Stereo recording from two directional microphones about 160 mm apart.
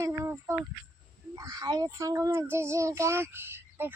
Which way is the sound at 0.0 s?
15° right (ahead or behind).